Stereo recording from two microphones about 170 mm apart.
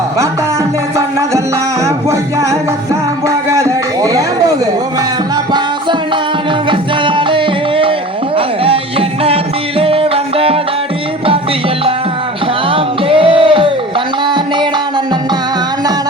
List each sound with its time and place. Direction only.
1.8 s music: 15° right (ahead or behind)
3.2 s a sound: 15° right (ahead or behind)
6.7 s music: 30° right (ahead or behind)
12.6 s music: 30° right (ahead or behind)